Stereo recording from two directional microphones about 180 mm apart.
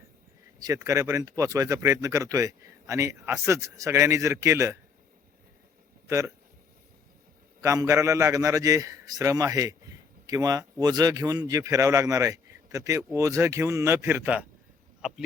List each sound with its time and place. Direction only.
0.6 s speech: 20° right (ahead or behind)
6.1 s speech: 15° right (ahead or behind)
7.6 s speech: 15° right (ahead or behind)